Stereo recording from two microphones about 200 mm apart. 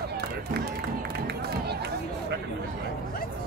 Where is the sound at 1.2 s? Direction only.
55° right (ahead or behind).